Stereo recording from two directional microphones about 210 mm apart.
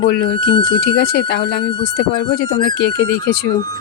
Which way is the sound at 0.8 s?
50° left (ahead or behind).